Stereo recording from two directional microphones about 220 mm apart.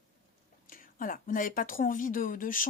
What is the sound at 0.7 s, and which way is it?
Speech, 40° left (ahead or behind).